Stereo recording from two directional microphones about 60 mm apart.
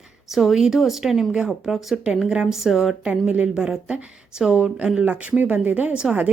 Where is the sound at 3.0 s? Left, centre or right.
Right.